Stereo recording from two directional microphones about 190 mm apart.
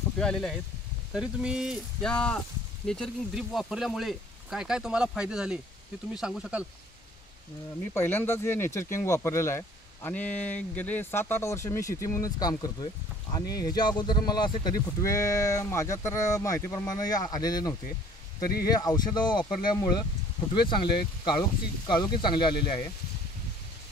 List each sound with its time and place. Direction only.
0.2 s speech: 5° left (ahead or behind)
7.9 s speech: 10° left (ahead or behind)